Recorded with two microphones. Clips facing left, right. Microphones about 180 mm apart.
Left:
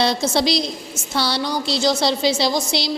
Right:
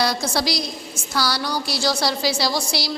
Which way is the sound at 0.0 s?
25° left (ahead or behind).